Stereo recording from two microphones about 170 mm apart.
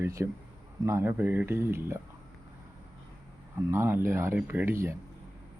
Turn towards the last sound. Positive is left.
turn(degrees=-15)  # may be behind; listen again after turning